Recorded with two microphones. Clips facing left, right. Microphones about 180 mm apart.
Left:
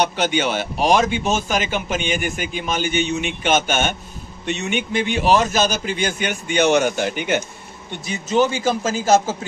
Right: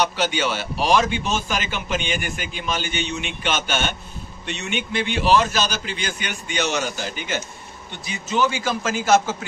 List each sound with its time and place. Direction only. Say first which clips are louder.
0.0 s a man's voice: left 2 dB; 50° left (ahead or behind)